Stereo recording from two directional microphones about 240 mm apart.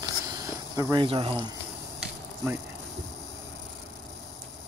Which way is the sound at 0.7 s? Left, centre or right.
Centre.